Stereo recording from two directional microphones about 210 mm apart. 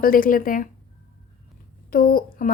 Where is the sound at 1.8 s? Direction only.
45° left (ahead or behind).